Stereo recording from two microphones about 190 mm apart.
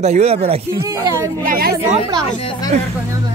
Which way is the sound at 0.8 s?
15° right (ahead or behind).